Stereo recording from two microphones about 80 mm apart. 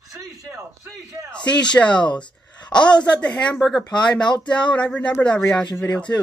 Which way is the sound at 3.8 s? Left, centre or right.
Centre.